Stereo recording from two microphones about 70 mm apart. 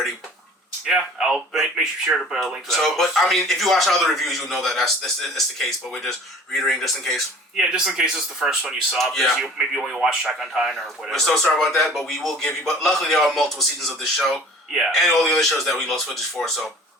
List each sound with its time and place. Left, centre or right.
0.9 s speech: centre
7.5 s speech: centre
11.3 s speech: centre